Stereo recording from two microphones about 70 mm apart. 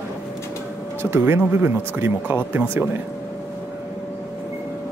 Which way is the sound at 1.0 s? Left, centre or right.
Right.